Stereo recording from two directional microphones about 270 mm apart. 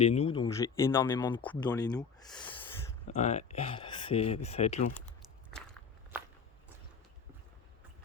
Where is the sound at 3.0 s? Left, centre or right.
Left.